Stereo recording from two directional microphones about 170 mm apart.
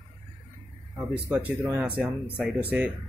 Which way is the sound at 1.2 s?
10° right (ahead or behind).